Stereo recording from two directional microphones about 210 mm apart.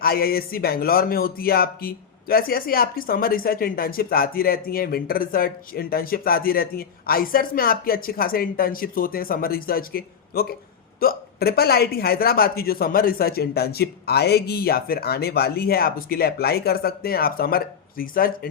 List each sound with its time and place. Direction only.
0.0 s speech: 45° left (ahead or behind)